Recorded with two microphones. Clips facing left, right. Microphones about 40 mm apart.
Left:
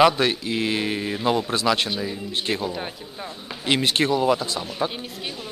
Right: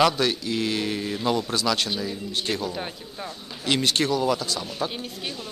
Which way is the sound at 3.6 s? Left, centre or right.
Centre.